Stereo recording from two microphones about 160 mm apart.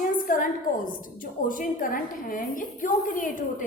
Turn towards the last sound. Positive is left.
turn(degrees=55)  # may be behind; listen again after turning